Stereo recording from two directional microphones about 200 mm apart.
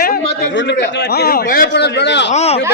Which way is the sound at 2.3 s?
30° left (ahead or behind).